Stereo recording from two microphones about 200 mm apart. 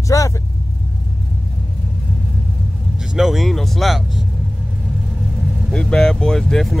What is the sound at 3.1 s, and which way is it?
Speech, centre (ahead or behind).